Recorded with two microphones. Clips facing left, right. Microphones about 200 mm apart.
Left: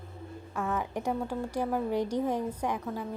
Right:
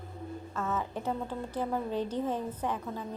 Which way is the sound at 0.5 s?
15° left (ahead or behind).